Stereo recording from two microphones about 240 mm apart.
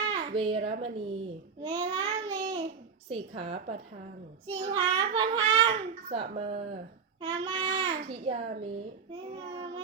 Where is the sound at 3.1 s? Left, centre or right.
Right.